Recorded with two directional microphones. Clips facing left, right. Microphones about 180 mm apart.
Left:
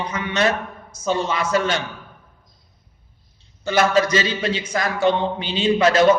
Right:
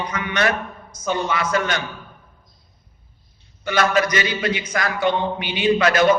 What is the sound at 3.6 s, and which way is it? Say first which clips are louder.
A man's voice: left 2 dB; 25° left (ahead or behind).